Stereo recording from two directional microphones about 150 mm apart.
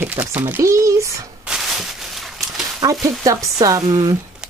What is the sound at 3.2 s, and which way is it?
Speech, 20° right (ahead or behind).